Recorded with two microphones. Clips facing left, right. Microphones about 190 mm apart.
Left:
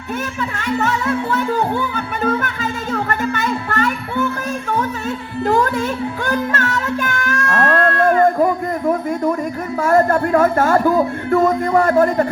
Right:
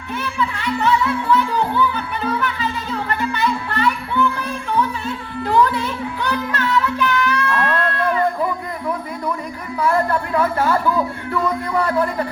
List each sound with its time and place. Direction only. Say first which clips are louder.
0.8 s music: right 2 dB; 45° left (ahead or behind)
9.8 s speech: left 4 dB; 45° left (ahead or behind)